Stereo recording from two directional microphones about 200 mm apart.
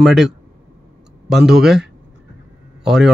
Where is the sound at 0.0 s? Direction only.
Centre (ahead or behind).